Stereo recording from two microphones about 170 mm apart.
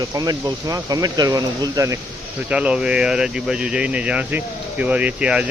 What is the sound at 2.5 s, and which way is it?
Speech, 5° right (ahead or behind).